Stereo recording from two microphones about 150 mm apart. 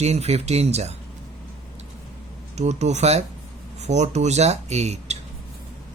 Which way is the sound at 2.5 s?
50° right (ahead or behind).